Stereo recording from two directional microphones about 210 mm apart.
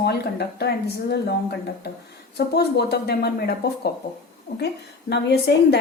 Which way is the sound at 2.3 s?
50° left (ahead or behind).